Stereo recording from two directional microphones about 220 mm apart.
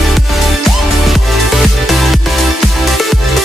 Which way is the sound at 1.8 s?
Centre (ahead or behind).